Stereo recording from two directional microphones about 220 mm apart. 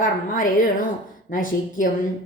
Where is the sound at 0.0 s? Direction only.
40° left (ahead or behind).